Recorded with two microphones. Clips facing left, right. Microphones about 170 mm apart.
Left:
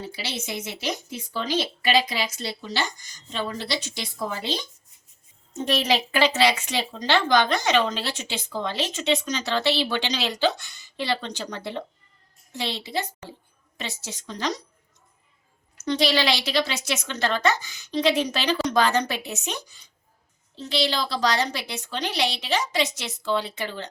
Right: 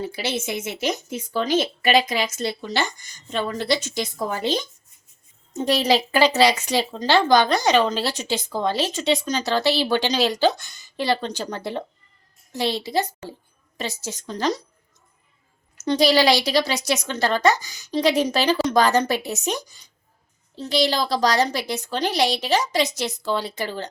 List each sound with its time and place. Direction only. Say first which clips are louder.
0.0 s speech: right 7 dB; 50° right (ahead or behind)
5.6 s a woman's voice: right 4 dB; 35° right (ahead or behind)
15.8 s a woman's voice: right 5 dB; 40° right (ahead or behind)